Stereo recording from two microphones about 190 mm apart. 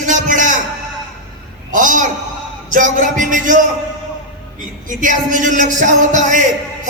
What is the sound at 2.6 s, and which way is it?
Speech, 40° right (ahead or behind).